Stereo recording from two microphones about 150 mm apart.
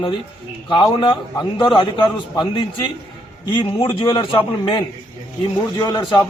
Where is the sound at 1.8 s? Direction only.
30° left (ahead or behind).